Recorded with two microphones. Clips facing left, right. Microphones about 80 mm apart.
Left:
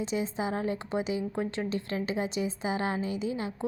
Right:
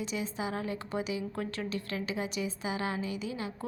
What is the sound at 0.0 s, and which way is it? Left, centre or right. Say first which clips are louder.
A woman's voice: left 4 dB; left.